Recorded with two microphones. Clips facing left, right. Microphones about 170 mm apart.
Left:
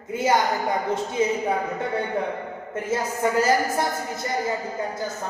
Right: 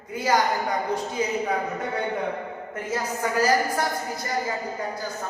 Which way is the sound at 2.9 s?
25° left (ahead or behind).